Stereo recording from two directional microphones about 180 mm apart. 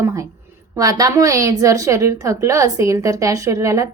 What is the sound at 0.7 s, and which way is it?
A woman's voice, 20° right (ahead or behind).